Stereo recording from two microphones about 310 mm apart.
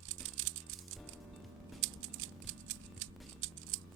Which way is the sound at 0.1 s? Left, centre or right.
Right.